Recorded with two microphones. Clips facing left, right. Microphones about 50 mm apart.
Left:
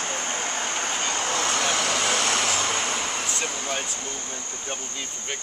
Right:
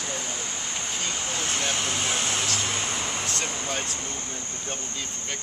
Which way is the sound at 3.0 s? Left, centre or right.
Left.